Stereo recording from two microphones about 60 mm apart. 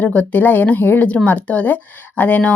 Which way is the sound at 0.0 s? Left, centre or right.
Left.